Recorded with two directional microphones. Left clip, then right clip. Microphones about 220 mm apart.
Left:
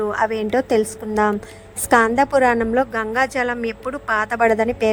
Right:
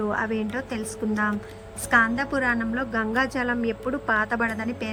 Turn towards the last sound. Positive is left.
turn(degrees=20)  # may be behind; listen again after turning